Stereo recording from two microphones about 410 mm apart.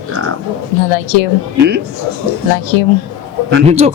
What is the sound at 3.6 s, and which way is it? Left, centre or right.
Speech, centre.